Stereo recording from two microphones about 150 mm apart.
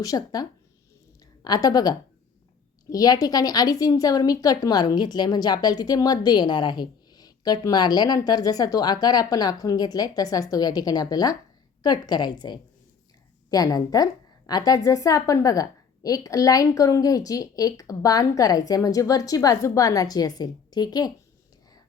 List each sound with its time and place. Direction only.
0.0 s a woman's voice: 25° left (ahead or behind)